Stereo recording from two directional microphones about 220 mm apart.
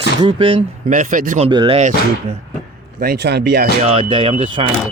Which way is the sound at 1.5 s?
20° right (ahead or behind).